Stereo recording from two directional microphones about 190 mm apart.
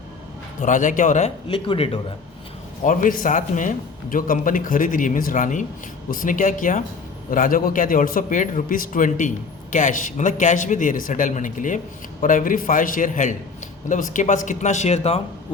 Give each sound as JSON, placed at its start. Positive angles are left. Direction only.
{"t": 0.6, "sound": "a man's voice", "side_deg": 40}
{"t": 2.8, "sound": "a man's voice", "side_deg": 45}